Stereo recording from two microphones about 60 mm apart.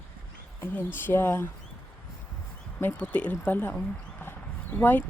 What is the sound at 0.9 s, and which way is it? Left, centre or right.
Speech, left.